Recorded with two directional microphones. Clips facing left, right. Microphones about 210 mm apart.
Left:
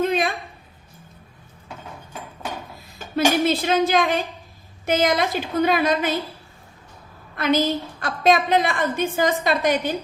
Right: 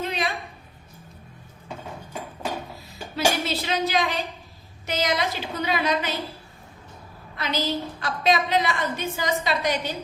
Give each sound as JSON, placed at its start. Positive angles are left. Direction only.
{"t": 0.0, "sound": "a sound", "side_deg": 50}
{"t": 3.2, "sound": "a woman's voice", "side_deg": 50}
{"t": 7.3, "sound": "a woman's voice", "side_deg": 50}